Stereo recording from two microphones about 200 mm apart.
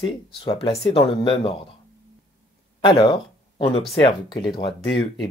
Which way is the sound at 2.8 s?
25° left (ahead or behind).